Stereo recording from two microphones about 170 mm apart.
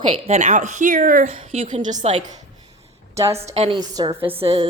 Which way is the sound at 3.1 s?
20° right (ahead or behind).